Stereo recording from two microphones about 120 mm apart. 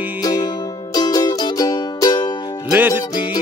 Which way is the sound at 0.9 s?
30° left (ahead or behind).